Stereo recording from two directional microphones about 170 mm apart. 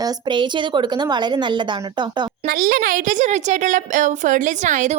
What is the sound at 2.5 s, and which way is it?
A woman's voice, 60° right (ahead or behind).